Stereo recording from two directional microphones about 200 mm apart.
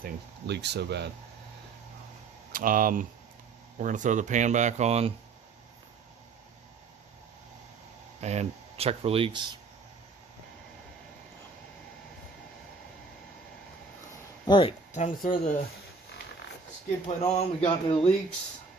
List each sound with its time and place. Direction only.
0.0 s speech: 55° right (ahead or behind)
2.5 s speech: 45° right (ahead or behind)
8.2 s speech: 35° right (ahead or behind)
14.4 s speech: 25° left (ahead or behind)
15.0 s speech: 40° left (ahead or behind)
17.3 s speech: 30° left (ahead or behind)